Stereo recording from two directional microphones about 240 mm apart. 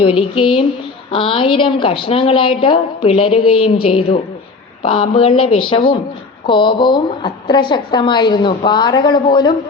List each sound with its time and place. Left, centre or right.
0.0 s a woman's voice: left
3.4 s speech: left
3.8 s a woman's voice: left